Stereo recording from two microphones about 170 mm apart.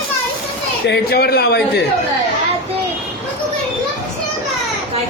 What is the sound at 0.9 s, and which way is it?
Speech, 70° left (ahead or behind).